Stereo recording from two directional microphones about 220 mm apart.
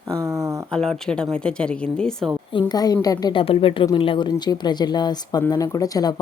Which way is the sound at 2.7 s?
15° left (ahead or behind).